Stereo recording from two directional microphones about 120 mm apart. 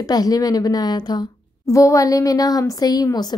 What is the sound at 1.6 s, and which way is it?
Speech, 25° left (ahead or behind).